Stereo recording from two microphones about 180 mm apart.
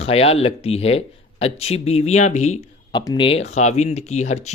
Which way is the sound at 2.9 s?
25° left (ahead or behind).